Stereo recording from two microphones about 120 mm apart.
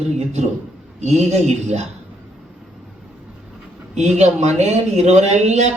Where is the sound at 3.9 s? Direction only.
70° right (ahead or behind).